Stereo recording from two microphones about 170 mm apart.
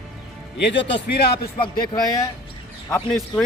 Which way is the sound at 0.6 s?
90° left.